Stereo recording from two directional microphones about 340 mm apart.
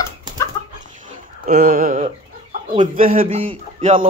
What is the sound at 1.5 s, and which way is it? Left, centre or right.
A man's voice, right.